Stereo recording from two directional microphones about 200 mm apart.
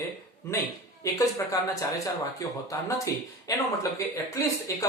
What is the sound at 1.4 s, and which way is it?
Speech, 15° left (ahead or behind).